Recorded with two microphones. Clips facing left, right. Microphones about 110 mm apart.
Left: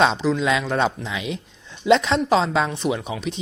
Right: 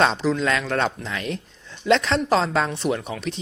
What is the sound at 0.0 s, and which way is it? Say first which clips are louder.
Speech: left 1 dB; centre (ahead or behind).